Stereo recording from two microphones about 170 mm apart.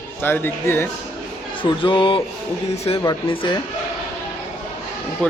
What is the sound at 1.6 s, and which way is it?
Speech, 30° left (ahead or behind).